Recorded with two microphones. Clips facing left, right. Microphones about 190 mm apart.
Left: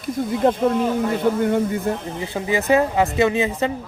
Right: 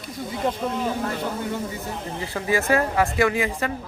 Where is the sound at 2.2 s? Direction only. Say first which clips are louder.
Left 2 dB; 20° left (ahead or behind).